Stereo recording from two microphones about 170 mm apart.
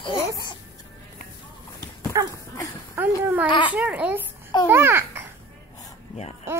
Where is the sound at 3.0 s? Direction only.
10° right (ahead or behind).